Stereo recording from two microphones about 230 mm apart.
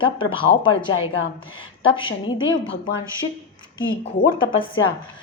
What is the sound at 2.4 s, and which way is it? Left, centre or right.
Speech, left.